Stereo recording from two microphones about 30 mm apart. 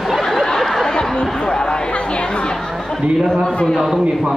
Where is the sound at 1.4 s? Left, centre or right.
Left.